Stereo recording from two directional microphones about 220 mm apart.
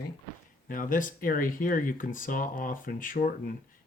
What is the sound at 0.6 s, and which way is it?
Speech, 40° left (ahead or behind).